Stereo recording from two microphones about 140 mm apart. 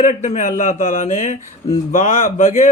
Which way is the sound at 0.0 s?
60° left (ahead or behind).